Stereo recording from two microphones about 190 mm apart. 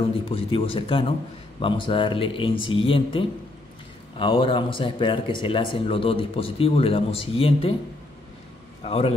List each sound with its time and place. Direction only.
0.1 s speech: 30° left (ahead or behind)
8.8 s a man's voice: 30° left (ahead or behind)